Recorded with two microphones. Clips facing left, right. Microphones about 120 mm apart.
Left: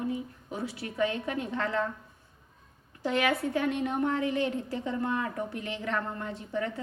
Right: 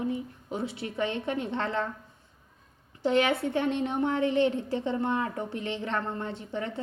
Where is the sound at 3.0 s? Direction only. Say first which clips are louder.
Right 3 dB; 25° right (ahead or behind).